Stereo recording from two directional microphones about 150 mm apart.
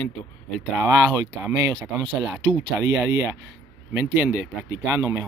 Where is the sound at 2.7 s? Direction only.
15° right (ahead or behind).